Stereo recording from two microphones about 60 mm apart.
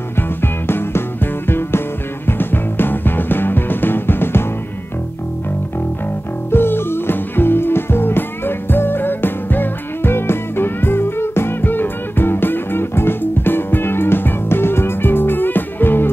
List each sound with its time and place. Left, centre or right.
0.4 s music: left
6.5 s music: left